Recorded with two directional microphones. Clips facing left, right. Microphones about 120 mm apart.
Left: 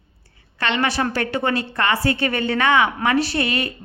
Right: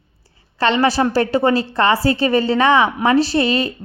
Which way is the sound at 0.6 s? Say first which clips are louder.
Right 6 dB; 30° right (ahead or behind).